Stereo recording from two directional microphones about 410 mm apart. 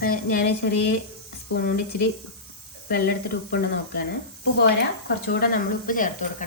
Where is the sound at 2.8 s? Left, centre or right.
Left.